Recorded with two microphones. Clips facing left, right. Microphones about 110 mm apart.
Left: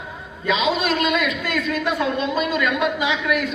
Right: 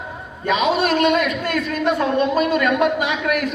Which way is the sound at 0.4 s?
45° right (ahead or behind).